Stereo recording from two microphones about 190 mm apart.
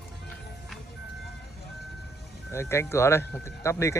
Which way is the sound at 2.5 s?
15° left (ahead or behind).